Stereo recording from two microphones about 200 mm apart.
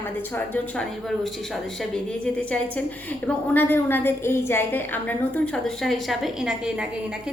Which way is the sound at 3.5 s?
10° left (ahead or behind).